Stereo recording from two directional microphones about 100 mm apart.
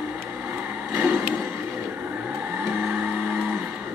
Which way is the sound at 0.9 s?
15° right (ahead or behind).